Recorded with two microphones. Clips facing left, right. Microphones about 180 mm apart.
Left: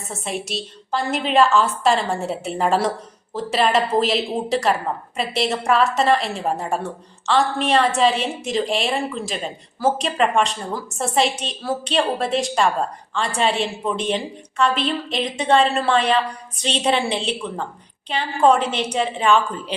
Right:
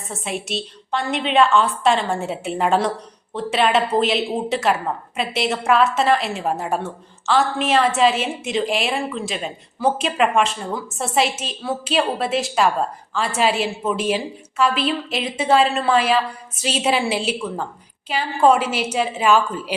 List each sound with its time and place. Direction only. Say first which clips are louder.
0.1 s a woman's voice: right 1 dB; centre (ahead or behind)